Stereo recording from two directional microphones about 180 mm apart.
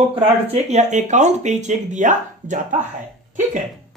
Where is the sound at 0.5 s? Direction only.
40° right (ahead or behind).